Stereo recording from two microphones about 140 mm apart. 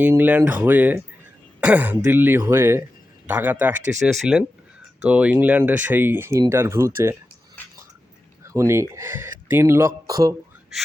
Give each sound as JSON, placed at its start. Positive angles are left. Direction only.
{"t": 0.0, "sound": "speech", "side_deg": -15}
{"t": 8.4, "sound": "speech", "side_deg": -20}